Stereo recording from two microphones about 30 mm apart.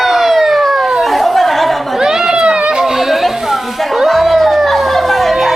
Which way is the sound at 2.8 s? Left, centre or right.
Centre.